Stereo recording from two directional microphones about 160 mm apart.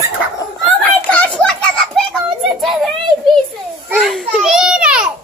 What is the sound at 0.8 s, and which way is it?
Children playing, 10° left (ahead or behind).